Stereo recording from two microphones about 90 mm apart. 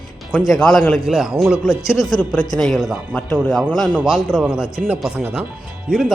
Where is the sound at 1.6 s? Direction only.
35° left (ahead or behind).